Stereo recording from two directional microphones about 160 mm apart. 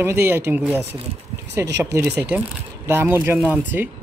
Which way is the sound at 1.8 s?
20° right (ahead or behind).